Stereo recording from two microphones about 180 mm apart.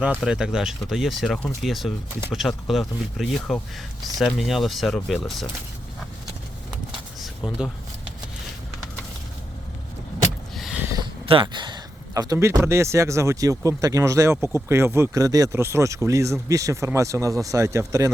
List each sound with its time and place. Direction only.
0.2 s speech: 5° right (ahead or behind)
7.2 s a sound: 5° right (ahead or behind)
10.5 s vehicle: centre (ahead or behind)
10.8 s speech: 25° right (ahead or behind)